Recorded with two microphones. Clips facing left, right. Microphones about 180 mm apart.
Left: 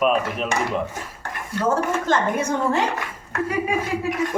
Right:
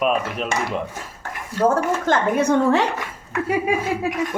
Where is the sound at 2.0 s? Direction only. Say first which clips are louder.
Right 3 dB; 60° right (ahead or behind).